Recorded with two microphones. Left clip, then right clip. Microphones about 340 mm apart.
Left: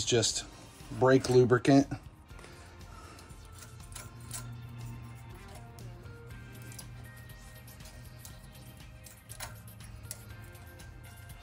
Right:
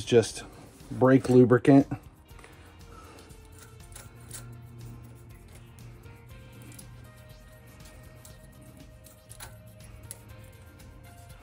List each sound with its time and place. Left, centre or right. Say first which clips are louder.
0.0 s speech: right 6 dB; centre